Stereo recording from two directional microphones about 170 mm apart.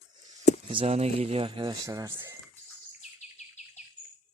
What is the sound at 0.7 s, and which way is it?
Speech, 35° right (ahead or behind).